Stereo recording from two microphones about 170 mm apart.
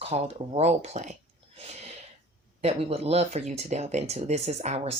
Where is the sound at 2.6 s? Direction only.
35° right (ahead or behind).